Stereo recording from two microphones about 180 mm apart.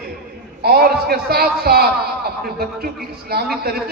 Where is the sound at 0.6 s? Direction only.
60° right (ahead or behind).